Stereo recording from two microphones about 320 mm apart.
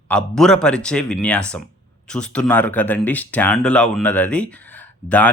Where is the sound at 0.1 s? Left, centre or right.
Centre.